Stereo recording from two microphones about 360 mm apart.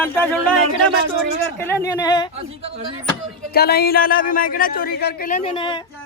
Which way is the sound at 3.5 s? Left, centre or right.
Left.